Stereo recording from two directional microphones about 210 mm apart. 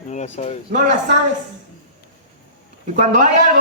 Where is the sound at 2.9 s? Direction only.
40° right (ahead or behind).